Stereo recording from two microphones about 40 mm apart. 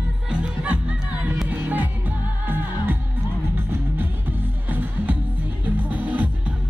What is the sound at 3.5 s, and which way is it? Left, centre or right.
Music, right.